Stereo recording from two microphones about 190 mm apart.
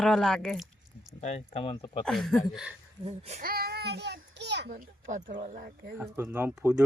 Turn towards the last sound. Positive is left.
turn(degrees=-5)  # may be behind; listen again after turning